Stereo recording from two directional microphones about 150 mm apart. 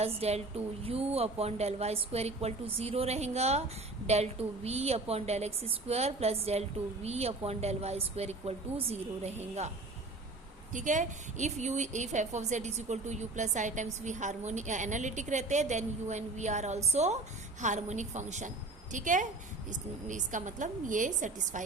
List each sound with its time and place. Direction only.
0.0 s a woman's voice: 45° right (ahead or behind)
10.7 s a woman's voice: 55° right (ahead or behind)